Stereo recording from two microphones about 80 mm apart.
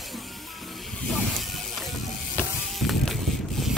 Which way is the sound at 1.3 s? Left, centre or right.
Centre.